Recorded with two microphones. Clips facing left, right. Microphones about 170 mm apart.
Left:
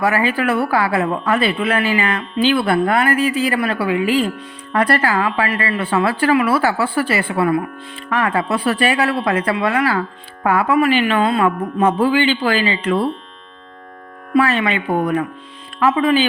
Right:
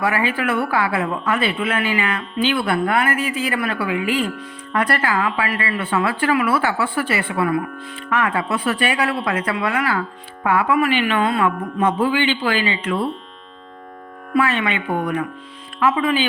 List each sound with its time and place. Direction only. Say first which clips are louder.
0.0 s a woman's voice: left 3 dB; 40° left (ahead or behind)
14.3 s a woman's voice: left 3 dB; 35° left (ahead or behind)